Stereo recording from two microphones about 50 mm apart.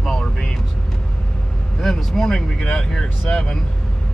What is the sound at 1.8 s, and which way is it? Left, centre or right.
Speech, centre.